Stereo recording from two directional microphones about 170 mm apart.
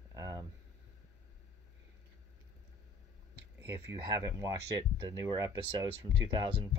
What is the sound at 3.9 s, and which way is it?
Speech, 20° right (ahead or behind).